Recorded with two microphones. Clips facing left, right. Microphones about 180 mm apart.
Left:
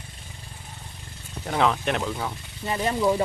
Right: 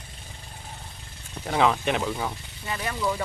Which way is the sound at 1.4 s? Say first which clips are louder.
Right 1 dB; centre (ahead or behind).